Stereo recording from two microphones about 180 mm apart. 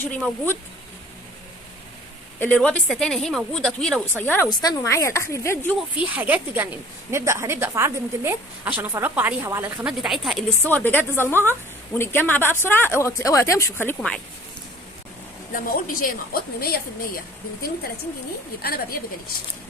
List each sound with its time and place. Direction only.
0.0 s speech: 10° left (ahead or behind)
2.4 s a woman's voice: 5° left (ahead or behind)
4.4 s speech: 25° left (ahead or behind)
6.0 s a woman's voice: 10° right (ahead or behind)
10.6 s speech: 10° left (ahead or behind)
15.5 s a woman's voice: 55° left (ahead or behind)
18.6 s a woman's voice: 55° left (ahead or behind)